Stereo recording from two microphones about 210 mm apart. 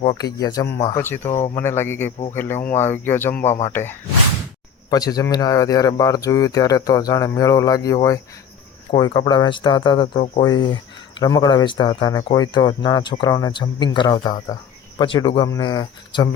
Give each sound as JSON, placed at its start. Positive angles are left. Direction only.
{"t": 0.0, "sound": "speech", "side_deg": 20}